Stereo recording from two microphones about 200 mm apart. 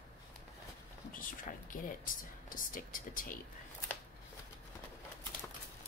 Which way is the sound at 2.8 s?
45° left (ahead or behind).